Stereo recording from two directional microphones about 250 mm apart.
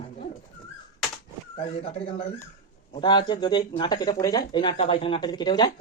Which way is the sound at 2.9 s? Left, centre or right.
Centre.